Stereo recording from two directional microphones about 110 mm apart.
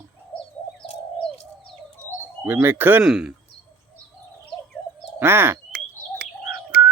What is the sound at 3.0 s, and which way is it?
Speech, 5° right (ahead or behind).